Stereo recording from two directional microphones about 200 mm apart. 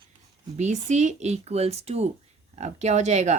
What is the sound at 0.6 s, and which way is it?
Speech, 35° right (ahead or behind).